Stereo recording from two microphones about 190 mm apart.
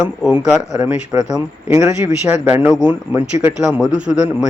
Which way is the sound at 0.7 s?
20° right (ahead or behind).